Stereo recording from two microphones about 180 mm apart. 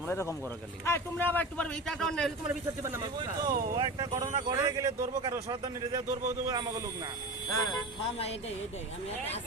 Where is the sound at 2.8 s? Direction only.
20° right (ahead or behind).